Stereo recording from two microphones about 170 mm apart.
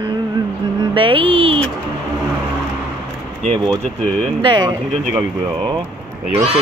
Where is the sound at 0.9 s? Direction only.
30° right (ahead or behind).